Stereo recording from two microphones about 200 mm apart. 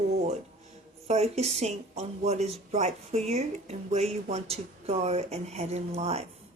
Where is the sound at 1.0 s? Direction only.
30° right (ahead or behind).